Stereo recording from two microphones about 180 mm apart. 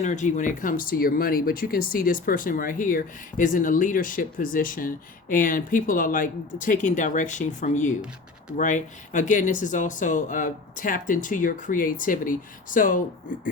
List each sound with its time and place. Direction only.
0.0 s speech: 40° left (ahead or behind)